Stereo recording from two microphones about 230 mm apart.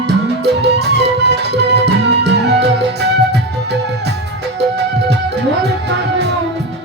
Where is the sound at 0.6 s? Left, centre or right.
Right.